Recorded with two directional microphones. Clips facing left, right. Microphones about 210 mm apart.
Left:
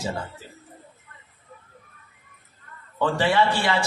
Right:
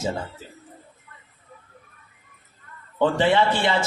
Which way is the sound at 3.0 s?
20° right (ahead or behind).